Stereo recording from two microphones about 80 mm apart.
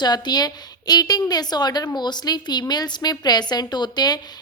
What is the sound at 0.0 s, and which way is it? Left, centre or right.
A woman's voice, left.